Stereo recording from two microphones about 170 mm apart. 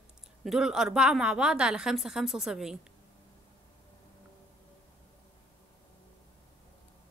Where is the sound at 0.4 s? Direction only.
5° right (ahead or behind).